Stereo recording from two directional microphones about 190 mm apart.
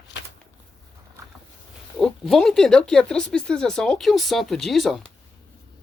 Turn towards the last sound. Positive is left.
turn(degrees=0)  # may be behind; listen again after turning